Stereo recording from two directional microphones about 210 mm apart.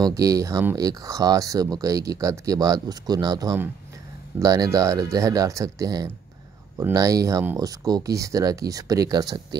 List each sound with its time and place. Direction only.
0.0 s speech: 15° right (ahead or behind)